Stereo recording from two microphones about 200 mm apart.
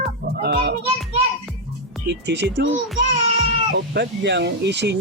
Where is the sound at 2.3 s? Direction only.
60° right (ahead or behind).